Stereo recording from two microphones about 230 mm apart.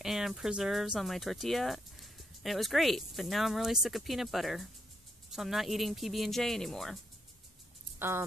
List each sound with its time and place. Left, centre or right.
0.0 s speech: centre